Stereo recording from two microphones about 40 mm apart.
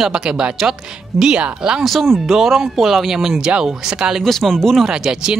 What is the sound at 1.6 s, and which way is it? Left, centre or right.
Speech, centre.